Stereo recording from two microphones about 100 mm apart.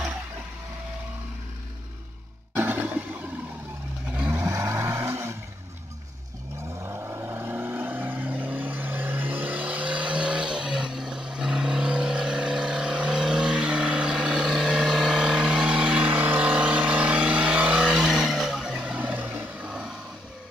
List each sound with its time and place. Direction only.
2.5 s roar: 20° right (ahead or behind)
4.3 s vehicle: 30° right (ahead or behind)
6.8 s vehicle: 25° right (ahead or behind); by 19.9 s 10° right (ahead or behind)